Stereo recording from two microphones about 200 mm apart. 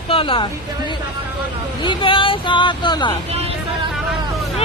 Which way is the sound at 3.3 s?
30° right (ahead or behind).